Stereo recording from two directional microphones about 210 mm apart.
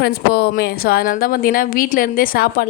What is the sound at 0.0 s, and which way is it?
A woman's voice, 50° left (ahead or behind).